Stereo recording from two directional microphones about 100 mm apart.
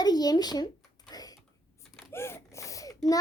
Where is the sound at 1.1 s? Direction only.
40° left (ahead or behind).